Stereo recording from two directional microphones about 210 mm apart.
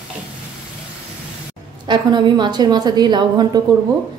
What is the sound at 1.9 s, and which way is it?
A woman's voice, 20° right (ahead or behind).